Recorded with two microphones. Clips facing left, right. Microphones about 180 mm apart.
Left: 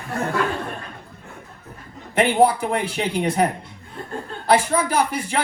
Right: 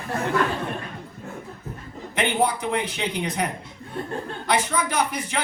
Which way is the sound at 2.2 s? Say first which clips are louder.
Left 6 dB; 30° left (ahead or behind).